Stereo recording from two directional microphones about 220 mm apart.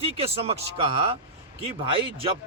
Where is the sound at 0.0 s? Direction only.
25° right (ahead or behind).